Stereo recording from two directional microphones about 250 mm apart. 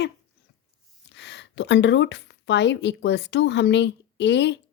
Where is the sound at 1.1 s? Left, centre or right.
Left.